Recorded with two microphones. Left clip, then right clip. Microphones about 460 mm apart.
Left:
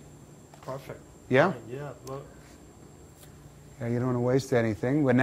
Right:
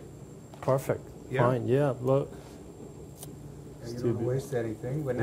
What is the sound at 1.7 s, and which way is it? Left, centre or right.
Speech, right.